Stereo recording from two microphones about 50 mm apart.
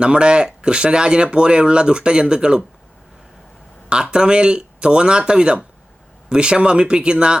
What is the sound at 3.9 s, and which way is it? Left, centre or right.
Speech, centre.